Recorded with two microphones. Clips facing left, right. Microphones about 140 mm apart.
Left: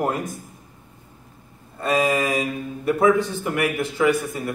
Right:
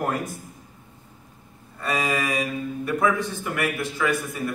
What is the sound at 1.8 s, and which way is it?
Speech, 25° left (ahead or behind).